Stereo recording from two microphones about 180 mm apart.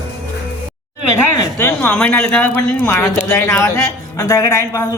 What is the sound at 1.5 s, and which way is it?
Speech, 10° left (ahead or behind).